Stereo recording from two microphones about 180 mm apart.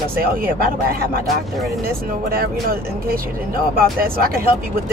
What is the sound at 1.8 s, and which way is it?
Speech, 55° right (ahead or behind).